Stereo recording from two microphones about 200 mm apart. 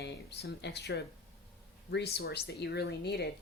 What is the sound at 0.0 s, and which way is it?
Speech, 55° left (ahead or behind).